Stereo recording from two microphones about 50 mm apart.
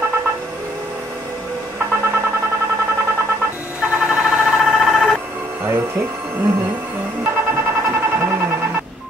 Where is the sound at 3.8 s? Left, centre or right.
Right.